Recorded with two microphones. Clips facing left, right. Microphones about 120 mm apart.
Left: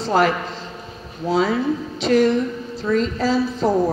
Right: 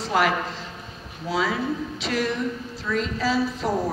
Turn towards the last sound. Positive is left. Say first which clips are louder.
# left 5 dB
turn(degrees=30)  # may be behind; listen again after turning